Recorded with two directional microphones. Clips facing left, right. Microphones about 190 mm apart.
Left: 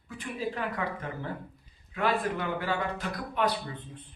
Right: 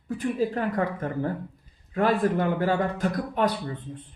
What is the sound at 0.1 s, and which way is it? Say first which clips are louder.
A man's voice: right 9 dB; 45° right (ahead or behind).